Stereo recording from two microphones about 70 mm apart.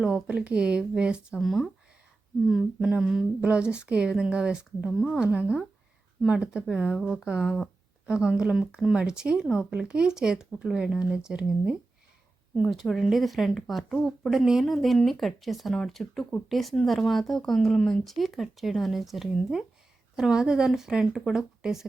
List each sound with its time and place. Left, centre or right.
0.0 s speech: centre
1.4 s speech: centre
2.5 s speech: centre
7.4 s speech: centre
8.0 s speech: centre
13.1 s speech: centre